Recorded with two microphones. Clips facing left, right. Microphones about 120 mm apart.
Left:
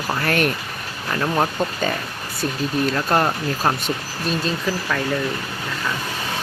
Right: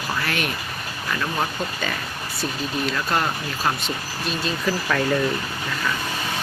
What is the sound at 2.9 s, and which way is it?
Speech, 40° left (ahead or behind).